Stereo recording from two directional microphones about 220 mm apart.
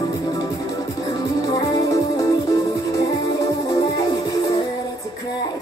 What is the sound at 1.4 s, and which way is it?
Music, 15° left (ahead or behind).